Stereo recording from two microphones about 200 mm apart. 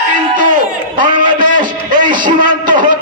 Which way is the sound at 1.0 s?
40° right (ahead or behind).